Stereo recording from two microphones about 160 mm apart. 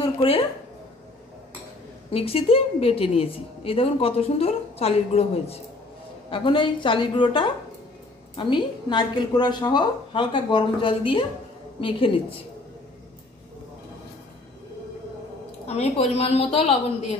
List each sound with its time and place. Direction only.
0.0 s speech: 35° left (ahead or behind)
2.0 s a woman's voice: 35° left (ahead or behind)
15.6 s a woman's voice: 40° left (ahead or behind)